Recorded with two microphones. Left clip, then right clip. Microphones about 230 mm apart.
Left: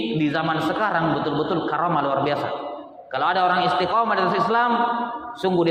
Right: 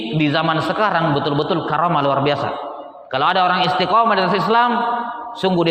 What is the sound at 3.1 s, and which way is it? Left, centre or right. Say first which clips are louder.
Speech: right 4 dB; right.